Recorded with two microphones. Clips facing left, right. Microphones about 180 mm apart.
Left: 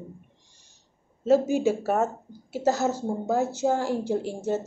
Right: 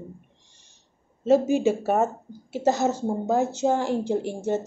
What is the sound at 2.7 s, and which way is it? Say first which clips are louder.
Speech: right 2 dB; 15° right (ahead or behind).